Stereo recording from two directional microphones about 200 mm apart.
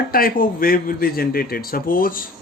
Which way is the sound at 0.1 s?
45° left (ahead or behind).